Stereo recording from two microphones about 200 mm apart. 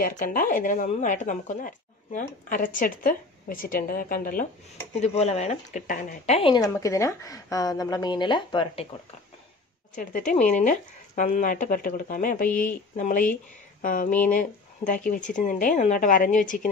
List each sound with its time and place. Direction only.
0.0 s speech: 45° left (ahead or behind)
5.0 s a woman's voice: 30° left (ahead or behind)
6.5 s a woman's voice: 15° left (ahead or behind)
9.9 s a woman's voice: 40° left (ahead or behind)